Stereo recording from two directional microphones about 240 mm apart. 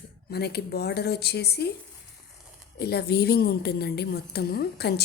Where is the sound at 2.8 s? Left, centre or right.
Left.